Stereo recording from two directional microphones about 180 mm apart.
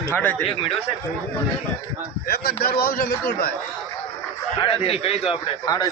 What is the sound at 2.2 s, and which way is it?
Speech, 55° left (ahead or behind).